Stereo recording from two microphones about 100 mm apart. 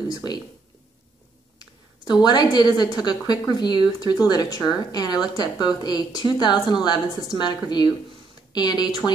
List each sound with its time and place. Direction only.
0.1 s speech: 45° left (ahead or behind)
1.6 s a woman's voice: 45° left (ahead or behind)